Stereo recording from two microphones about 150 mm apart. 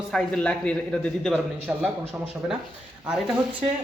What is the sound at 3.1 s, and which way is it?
Speech, 5° right (ahead or behind).